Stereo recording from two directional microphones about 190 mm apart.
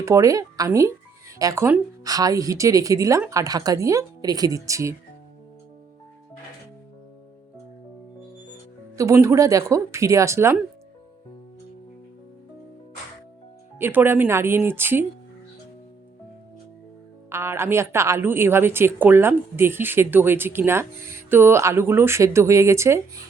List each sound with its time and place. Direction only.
0.0 s a woman's voice: 15° right (ahead or behind)
9.0 s a woman's voice: 15° right (ahead or behind)
13.7 s a woman's voice: 10° right (ahead or behind)
17.2 s a woman's voice: 15° right (ahead or behind)